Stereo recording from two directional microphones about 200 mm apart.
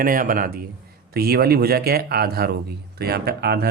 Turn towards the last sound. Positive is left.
turn(degrees=-55)  # may be behind; listen again after turning